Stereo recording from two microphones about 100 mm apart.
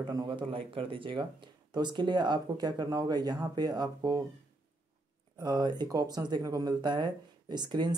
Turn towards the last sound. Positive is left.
turn(degrees=-45)  # may be behind; listen again after turning